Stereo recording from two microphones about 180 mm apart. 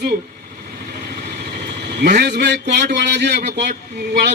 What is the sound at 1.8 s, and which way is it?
A man's voice, 65° right (ahead or behind).